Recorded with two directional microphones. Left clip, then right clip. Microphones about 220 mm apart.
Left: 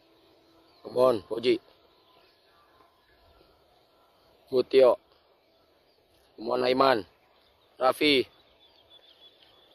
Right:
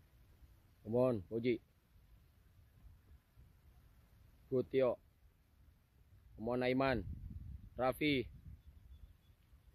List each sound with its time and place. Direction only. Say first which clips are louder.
0.9 s speech: left 12 dB; 5° left (ahead or behind)
4.6 s speech: left 15 dB; 5° left (ahead or behind)
6.5 s speech: left 13 dB; 10° left (ahead or behind)